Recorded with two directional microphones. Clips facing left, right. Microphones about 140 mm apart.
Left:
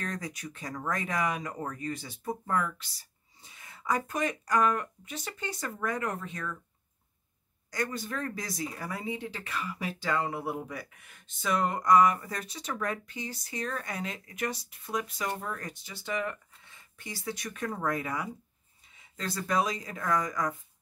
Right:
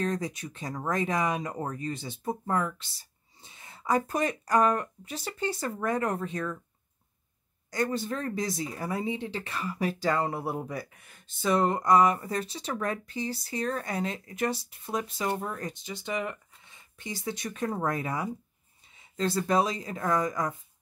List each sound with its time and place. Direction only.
0.0 s speech: 25° right (ahead or behind)
7.7 s speech: 30° right (ahead or behind)